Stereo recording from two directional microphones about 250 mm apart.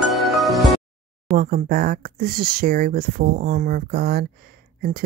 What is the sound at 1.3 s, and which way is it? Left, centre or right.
Speech, right.